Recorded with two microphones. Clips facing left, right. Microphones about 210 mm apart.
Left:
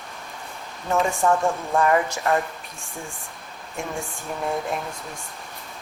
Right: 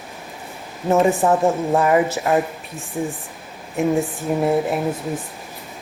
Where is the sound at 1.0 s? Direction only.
15° right (ahead or behind).